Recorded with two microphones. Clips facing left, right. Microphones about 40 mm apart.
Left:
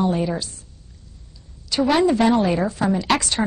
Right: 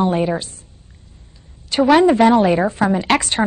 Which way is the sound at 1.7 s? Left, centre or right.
Right.